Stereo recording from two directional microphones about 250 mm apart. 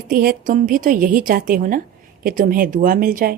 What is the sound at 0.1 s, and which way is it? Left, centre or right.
A woman's voice, right.